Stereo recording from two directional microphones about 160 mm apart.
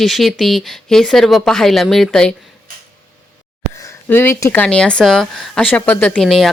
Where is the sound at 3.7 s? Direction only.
15° left (ahead or behind).